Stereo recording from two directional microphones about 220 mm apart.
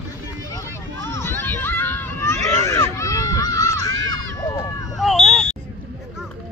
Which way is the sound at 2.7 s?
15° left (ahead or behind).